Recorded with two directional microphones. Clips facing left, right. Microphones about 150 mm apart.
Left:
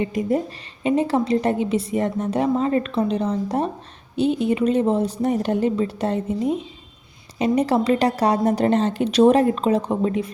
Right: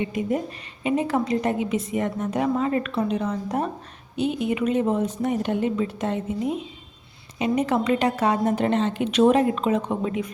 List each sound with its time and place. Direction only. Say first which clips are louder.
0.0 s a woman's voice: left 3 dB; 40° left (ahead or behind)